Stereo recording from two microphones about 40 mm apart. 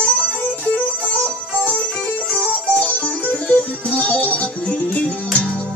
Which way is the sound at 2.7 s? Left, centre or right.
Left.